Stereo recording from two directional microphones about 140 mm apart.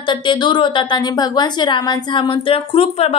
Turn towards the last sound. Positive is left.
turn(degrees=45)  # may be behind; listen again after turning